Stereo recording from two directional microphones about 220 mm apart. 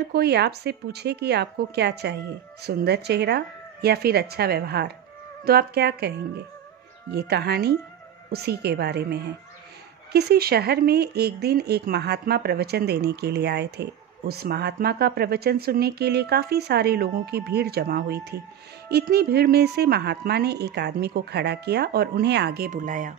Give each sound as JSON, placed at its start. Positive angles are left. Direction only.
{"t": 0.1, "sound": "speech", "side_deg": -50}